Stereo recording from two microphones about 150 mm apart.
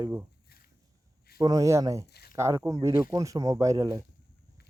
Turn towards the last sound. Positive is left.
turn(degrees=-25)  # may be behind; listen again after turning